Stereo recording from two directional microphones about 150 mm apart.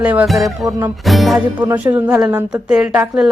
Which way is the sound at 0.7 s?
20° right (ahead or behind).